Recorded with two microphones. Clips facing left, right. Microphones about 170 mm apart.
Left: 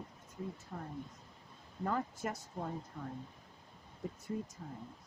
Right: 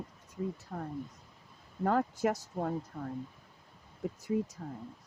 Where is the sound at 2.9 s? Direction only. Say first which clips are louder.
Right 5 dB; 50° right (ahead or behind).